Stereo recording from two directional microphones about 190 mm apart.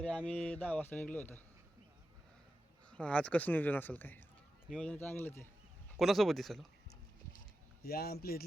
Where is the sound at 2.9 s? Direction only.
5° left (ahead or behind).